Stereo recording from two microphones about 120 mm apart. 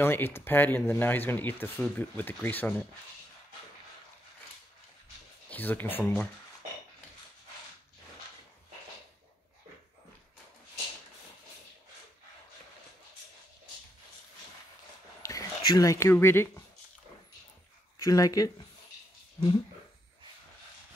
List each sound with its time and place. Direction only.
0.0 s speech: 20° left (ahead or behind)
5.5 s speech: 15° left (ahead or behind)
15.2 s speech: 30° left (ahead or behind)
17.9 s speech: 30° left (ahead or behind)